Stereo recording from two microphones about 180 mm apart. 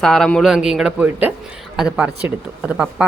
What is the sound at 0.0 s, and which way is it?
A woman's voice, centre (ahead or behind).